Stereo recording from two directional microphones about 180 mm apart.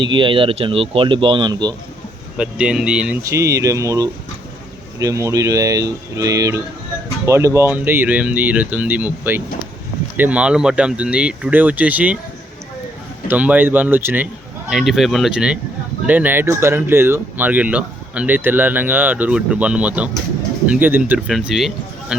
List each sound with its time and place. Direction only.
0.0 s speech: 25° right (ahead or behind)
2.4 s speech: 5° right (ahead or behind)
3.2 s speech: 15° right (ahead or behind)
13.2 s speech: 10° right (ahead or behind)